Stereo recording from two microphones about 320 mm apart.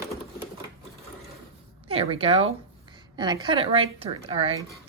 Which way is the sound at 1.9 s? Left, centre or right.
Centre.